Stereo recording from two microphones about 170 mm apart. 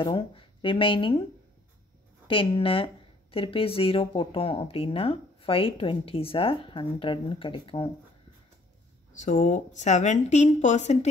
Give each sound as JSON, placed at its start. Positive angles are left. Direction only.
{"t": 0.0, "sound": "speech", "side_deg": 30}
{"t": 2.2, "sound": "speech", "side_deg": 30}
{"t": 9.1, "sound": "speech", "side_deg": 45}